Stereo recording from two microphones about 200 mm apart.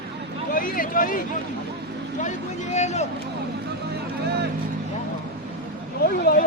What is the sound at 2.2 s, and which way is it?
Speech, 35° left (ahead or behind).